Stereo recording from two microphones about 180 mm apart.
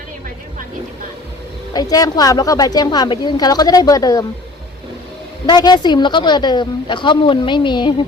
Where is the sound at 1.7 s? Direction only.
20° left (ahead or behind).